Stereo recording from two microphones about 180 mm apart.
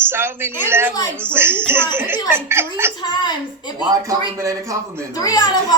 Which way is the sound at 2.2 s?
15° right (ahead or behind).